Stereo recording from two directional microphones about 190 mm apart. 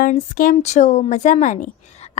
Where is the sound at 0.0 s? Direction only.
45° left (ahead or behind).